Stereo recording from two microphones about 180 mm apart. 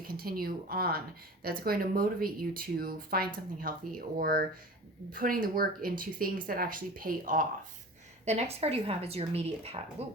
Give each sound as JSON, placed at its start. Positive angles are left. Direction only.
{"t": 0.0, "sound": "speech", "side_deg": -55}
{"t": 8.2, "sound": "speech", "side_deg": -35}